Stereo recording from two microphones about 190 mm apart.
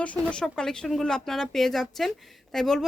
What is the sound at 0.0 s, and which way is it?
Speech, 5° left (ahead or behind).